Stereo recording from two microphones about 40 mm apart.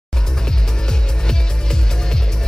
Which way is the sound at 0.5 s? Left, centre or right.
Centre.